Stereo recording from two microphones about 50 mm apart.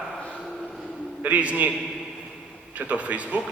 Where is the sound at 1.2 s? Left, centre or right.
Right.